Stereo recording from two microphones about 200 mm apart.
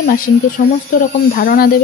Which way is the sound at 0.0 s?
45° left (ahead or behind).